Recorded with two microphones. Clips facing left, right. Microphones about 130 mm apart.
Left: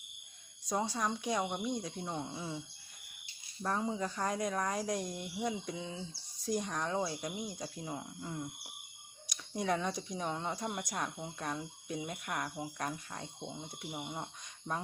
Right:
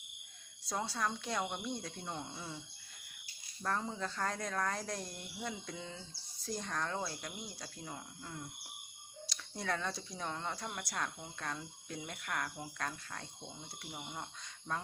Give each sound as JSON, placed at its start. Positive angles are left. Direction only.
{"t": 0.7, "sound": "speech", "side_deg": 15}
{"t": 3.6, "sound": "speech", "side_deg": 10}